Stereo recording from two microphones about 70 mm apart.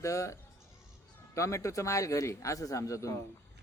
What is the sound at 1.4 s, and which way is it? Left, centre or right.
A man's voice, left.